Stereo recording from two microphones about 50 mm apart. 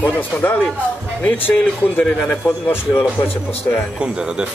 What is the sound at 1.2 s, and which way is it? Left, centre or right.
Speech, left.